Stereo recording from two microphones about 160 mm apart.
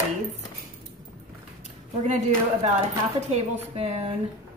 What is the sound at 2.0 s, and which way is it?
A woman's voice, 50° right (ahead or behind).